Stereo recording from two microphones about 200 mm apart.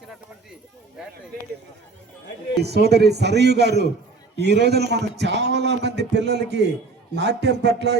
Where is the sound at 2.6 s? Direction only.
55° right (ahead or behind).